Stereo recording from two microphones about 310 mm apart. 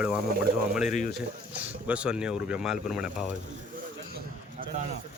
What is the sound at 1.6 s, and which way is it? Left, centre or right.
Speech, centre.